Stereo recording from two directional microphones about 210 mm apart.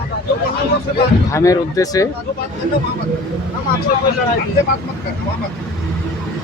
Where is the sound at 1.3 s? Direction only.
15° left (ahead or behind).